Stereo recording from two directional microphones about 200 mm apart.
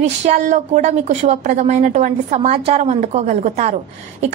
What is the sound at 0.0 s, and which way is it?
A woman's voice, 35° right (ahead or behind).